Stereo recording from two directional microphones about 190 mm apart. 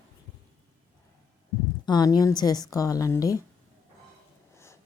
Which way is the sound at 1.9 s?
20° left (ahead or behind).